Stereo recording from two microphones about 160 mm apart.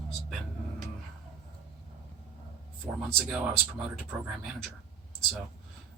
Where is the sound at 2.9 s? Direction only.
15° right (ahead or behind).